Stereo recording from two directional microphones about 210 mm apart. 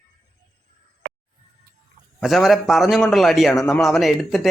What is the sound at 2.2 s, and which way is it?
Speech, centre (ahead or behind).